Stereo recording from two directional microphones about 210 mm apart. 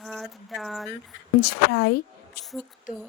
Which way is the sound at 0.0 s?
Centre (ahead or behind).